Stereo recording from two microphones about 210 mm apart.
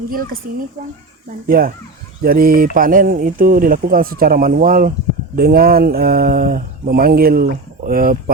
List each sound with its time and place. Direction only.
1.5 s speech: 45° right (ahead or behind)